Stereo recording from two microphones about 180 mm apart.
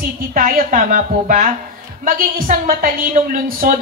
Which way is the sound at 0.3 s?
50° right (ahead or behind).